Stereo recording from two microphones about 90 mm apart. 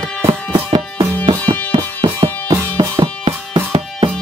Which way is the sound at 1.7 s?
55° right (ahead or behind).